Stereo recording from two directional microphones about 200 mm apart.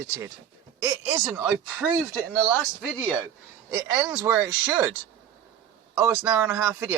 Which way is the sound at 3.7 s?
15° right (ahead or behind).